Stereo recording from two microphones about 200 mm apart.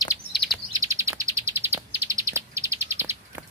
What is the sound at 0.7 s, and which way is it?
Bird, 15° right (ahead or behind).